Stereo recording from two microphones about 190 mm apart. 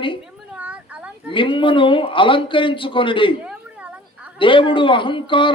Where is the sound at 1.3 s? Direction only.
25° left (ahead or behind).